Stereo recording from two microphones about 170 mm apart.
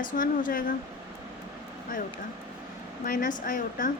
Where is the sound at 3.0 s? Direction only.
55° left (ahead or behind).